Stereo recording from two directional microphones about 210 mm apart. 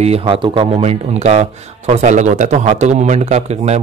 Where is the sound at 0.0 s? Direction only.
25° right (ahead or behind).